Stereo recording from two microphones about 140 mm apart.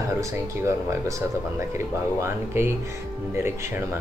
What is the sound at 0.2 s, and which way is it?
Speech, 20° right (ahead or behind).